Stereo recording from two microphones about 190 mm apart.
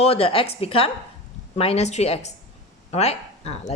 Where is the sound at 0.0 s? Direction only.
30° left (ahead or behind).